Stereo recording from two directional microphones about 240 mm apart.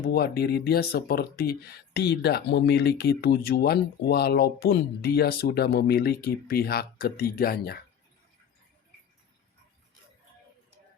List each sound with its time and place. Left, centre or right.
0.0 s speech: left